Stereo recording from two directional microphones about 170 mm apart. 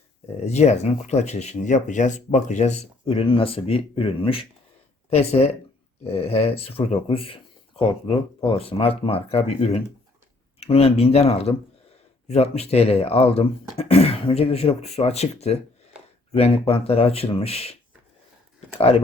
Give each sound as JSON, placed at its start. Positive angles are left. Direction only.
{"t": 0.3, "sound": "speech", "side_deg": 40}
{"t": 18.8, "sound": "speech", "side_deg": 35}